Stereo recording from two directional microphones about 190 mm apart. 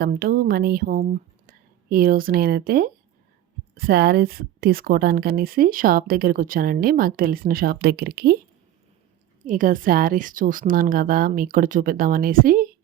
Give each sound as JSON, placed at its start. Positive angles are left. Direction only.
{"t": 0.0, "sound": "speech", "side_deg": -55}
{"t": 9.4, "sound": "speech", "side_deg": -45}